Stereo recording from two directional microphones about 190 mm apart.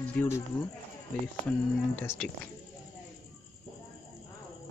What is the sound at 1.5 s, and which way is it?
Speech, 10° left (ahead or behind).